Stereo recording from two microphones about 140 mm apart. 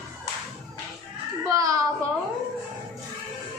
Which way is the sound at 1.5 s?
25° right (ahead or behind).